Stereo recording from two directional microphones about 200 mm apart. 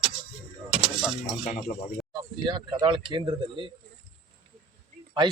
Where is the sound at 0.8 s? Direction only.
Centre (ahead or behind).